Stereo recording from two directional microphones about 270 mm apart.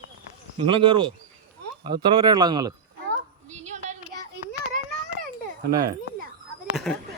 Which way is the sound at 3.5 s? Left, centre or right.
Right.